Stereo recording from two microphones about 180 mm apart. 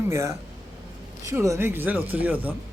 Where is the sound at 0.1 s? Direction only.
15° right (ahead or behind).